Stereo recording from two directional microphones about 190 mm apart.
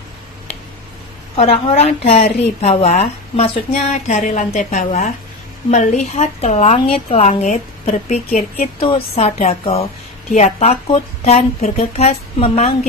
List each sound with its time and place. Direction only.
1.3 s a woman's voice: 35° left (ahead or behind)